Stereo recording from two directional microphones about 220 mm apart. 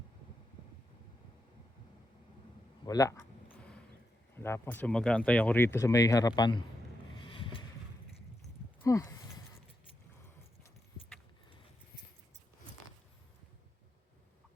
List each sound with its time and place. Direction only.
2.8 s a sound: 15° left (ahead or behind)
4.4 s speech: 10° left (ahead or behind)
7.2 s boat: 25° left (ahead or behind)
8.8 s speech: 15° left (ahead or behind)